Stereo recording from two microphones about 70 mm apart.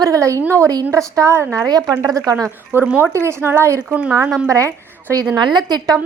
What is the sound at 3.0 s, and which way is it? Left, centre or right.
Speech, right.